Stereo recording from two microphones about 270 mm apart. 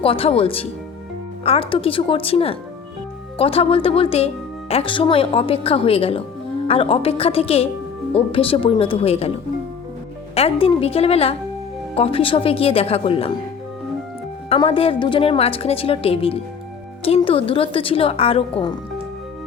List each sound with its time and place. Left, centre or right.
0.0 s a woman's voice: left
10.3 s a woman's voice: left
14.5 s a woman's voice: centre